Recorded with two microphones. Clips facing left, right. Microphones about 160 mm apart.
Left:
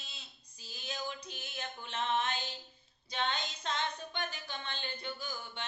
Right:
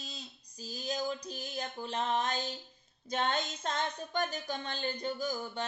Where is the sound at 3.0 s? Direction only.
45° right (ahead or behind).